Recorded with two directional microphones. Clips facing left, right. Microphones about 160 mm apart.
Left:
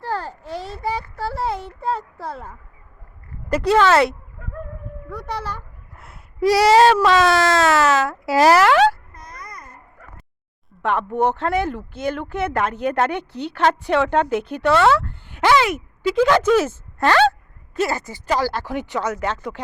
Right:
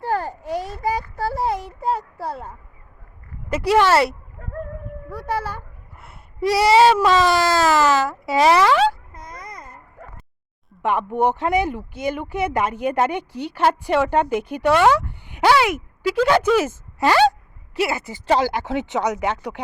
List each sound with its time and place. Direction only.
0.0 s babbling: 15° right (ahead or behind)
3.5 s speech: 10° right (ahead or behind)
9.1 s babbling: 20° right (ahead or behind)
10.8 s speech: 10° right (ahead or behind)